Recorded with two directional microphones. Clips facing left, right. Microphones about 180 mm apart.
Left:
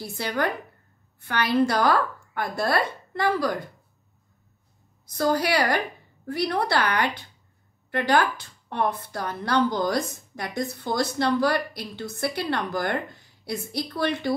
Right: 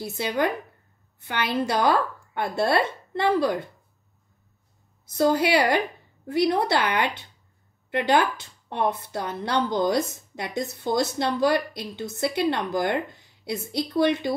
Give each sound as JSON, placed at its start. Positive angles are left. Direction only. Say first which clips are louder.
{"t": 0.0, "sound": "a woman's voice", "louder": "right 2 dB", "side_deg": -20}
{"t": 5.0, "sound": "a woman's voice", "louder": "right 2 dB", "side_deg": -20}